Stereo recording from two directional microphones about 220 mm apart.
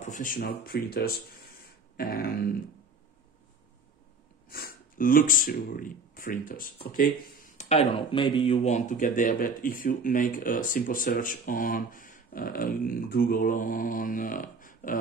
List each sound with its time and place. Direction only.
0.0 s speech: 35° left (ahead or behind)
4.5 s speech: 45° left (ahead or behind)